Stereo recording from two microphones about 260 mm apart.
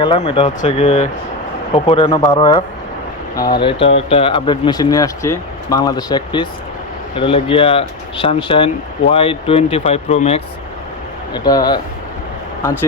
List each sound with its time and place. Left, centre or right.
0.0 s speech: centre